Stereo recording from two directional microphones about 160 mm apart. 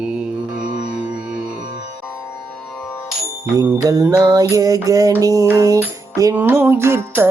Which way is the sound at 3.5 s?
20° right (ahead or behind).